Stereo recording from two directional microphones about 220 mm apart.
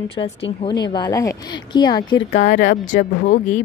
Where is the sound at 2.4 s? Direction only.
35° left (ahead or behind).